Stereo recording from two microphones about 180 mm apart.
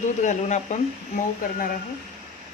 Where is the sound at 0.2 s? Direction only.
40° left (ahead or behind).